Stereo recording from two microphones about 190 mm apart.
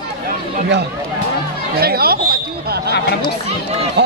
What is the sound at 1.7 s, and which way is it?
Speech, 55° right (ahead or behind).